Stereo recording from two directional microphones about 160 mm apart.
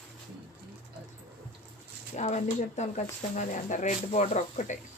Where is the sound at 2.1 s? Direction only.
45° left (ahead or behind).